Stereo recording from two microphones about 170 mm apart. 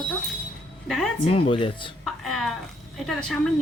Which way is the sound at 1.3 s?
35° left (ahead or behind).